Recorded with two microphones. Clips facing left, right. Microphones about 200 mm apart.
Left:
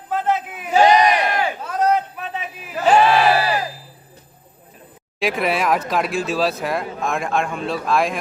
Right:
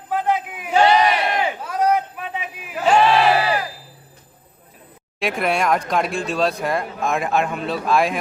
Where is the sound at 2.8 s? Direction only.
5° left (ahead or behind).